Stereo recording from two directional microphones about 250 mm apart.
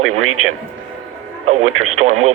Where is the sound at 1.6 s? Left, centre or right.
Right.